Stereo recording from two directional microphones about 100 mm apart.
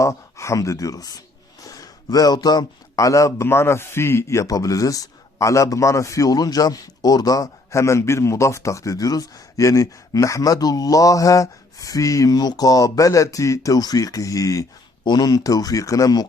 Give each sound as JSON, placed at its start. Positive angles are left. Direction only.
{"t": 0.0, "sound": "a man's voice", "side_deg": 30}